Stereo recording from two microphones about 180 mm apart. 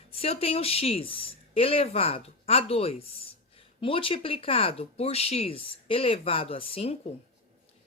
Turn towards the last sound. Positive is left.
turn(degrees=30)  # may be behind; listen again after turning